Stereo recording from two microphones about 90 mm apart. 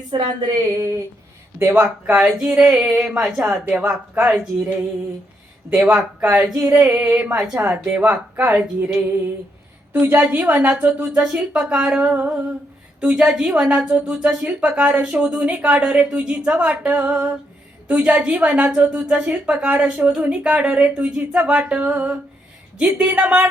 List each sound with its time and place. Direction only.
0.1 s a woman's voice: 55° right (ahead or behind)
0.7 s a sound: 35° right (ahead or behind)
1.5 s a woman's voice: 25° right (ahead or behind)
5.7 s a woman's voice: 15° right (ahead or behind)
6.6 s a woman's voice: 20° right (ahead or behind)